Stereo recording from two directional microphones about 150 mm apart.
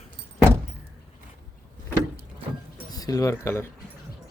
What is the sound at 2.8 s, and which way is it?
Speech, 25° left (ahead or behind).